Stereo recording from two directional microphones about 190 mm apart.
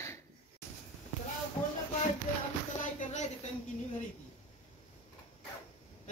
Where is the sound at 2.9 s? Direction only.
35° left (ahead or behind).